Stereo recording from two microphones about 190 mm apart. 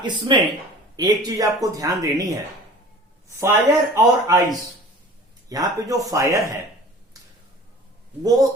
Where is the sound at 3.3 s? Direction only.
15° right (ahead or behind).